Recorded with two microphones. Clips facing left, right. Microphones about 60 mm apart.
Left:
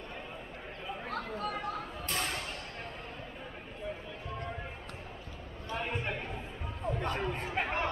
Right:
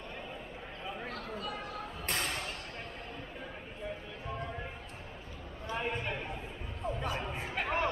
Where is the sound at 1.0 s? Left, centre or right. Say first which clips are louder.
Left 7 dB; left.